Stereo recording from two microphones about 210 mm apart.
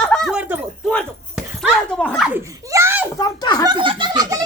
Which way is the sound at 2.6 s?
10° right (ahead or behind).